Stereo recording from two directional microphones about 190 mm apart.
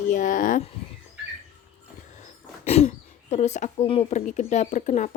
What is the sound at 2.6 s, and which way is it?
Speech, 35° left (ahead or behind).